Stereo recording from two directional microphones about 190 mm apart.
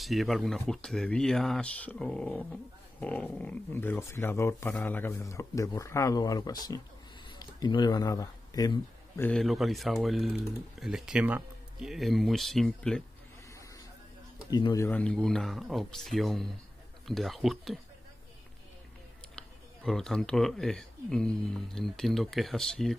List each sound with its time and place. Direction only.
0.0 s a man's voice: centre (ahead or behind); by 9.3 s 15° left (ahead or behind)
9.3 s speech: centre (ahead or behind)
14.5 s speech: 20° left (ahead or behind)
14.9 s speech: 5° left (ahead or behind)
19.3 s speech: 5° left (ahead or behind)